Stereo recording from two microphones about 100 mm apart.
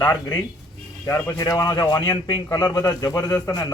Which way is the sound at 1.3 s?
30° left (ahead or behind).